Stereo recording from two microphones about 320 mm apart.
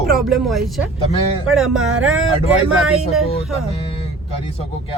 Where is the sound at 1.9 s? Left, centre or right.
Right.